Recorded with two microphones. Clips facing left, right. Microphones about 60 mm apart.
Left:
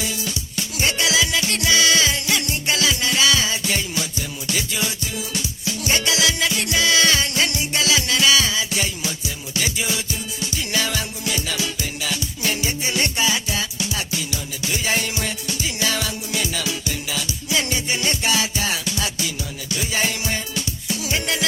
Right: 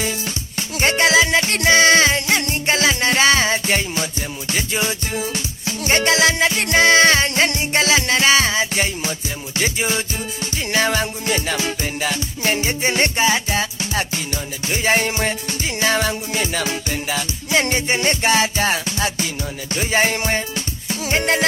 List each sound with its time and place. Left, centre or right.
0.0 s music: right